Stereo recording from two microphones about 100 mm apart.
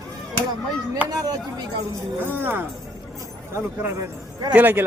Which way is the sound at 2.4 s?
20° right (ahead or behind).